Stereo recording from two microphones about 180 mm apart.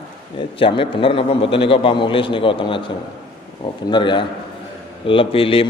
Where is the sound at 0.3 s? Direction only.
30° left (ahead or behind).